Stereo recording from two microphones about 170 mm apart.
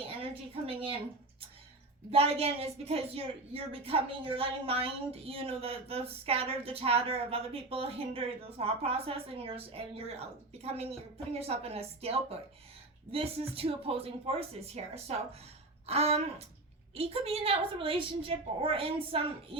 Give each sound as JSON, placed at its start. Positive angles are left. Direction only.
{"t": 0.2, "sound": "a woman's voice", "side_deg": -35}
{"t": 2.0, "sound": "a woman's voice", "side_deg": -35}